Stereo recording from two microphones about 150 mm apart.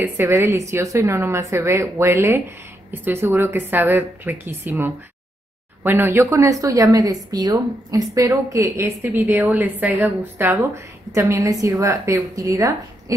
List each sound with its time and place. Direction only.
0.0 s a woman's voice: 15° right (ahead or behind)